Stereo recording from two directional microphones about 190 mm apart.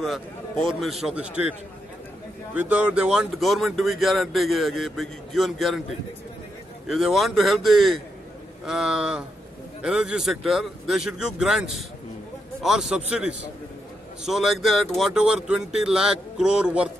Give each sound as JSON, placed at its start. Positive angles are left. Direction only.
{"t": 0.0, "sound": "speech", "side_deg": 0}
{"t": 2.5, "sound": "speech", "side_deg": -10}
{"t": 6.9, "sound": "speech", "side_deg": 0}